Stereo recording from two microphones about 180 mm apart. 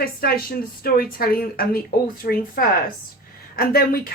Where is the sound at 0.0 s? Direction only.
55° left (ahead or behind).